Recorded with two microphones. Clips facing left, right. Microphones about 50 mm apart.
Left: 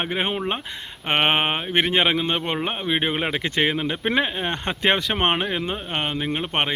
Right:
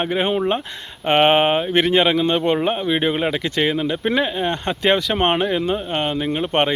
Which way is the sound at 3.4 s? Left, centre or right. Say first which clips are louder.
Right 2 dB; left.